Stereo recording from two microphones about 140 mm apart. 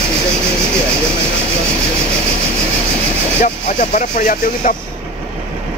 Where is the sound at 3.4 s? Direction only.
70° left (ahead or behind).